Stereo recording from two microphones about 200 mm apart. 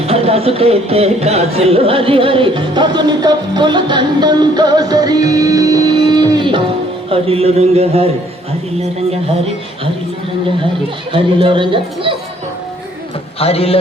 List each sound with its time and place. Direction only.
0.0 s speech: 30° right (ahead or behind)
11.1 s speech: 25° right (ahead or behind)
13.4 s a man's voice: 30° left (ahead or behind)